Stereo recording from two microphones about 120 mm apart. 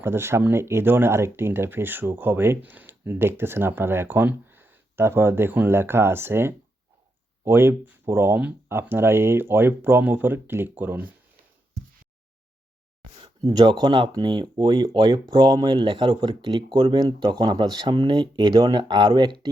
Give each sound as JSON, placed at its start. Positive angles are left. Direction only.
{"t": 0.0, "sound": "speech", "side_deg": -20}
{"t": 13.2, "sound": "speech", "side_deg": -35}